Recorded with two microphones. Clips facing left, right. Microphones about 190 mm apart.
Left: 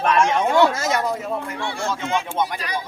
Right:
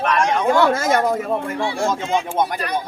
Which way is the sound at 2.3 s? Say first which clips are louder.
Right 3 dB; 55° right (ahead or behind).